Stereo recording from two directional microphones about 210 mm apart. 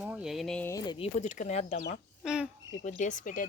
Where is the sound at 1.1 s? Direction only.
35° left (ahead or behind).